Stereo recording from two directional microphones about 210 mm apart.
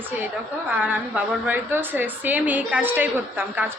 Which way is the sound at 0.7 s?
10° right (ahead or behind).